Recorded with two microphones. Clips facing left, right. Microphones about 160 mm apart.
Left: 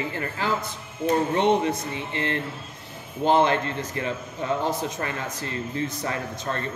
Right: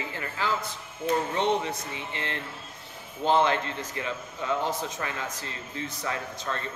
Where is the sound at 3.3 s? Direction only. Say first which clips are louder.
Left 3 dB; 50° left (ahead or behind).